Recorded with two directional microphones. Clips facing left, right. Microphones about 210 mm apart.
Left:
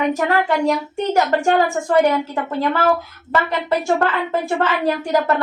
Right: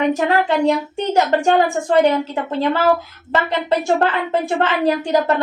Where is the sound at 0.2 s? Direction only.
20° right (ahead or behind).